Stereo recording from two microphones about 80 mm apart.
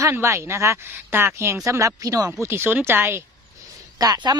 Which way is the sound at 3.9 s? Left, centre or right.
Right.